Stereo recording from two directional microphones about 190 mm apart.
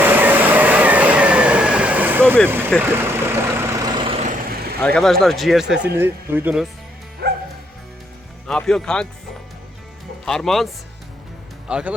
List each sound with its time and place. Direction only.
0.0 s vehicle: 10° right (ahead or behind)
2.5 s speech: 10° right (ahead or behind)
2.9 s vehicle: 10° right (ahead or behind); by 4.8 s 50° right (ahead or behind)
4.9 s speech: centre (ahead or behind)
7.2 s music: 55° right (ahead or behind)
8.4 s speech: 5° left (ahead or behind)
10.2 s speech: centre (ahead or behind)
11.7 s speech: 5° right (ahead or behind)